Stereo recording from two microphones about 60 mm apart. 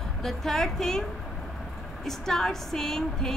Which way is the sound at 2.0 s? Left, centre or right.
Centre.